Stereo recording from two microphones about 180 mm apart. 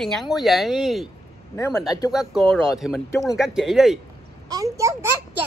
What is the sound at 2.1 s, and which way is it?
Speech, centre (ahead or behind).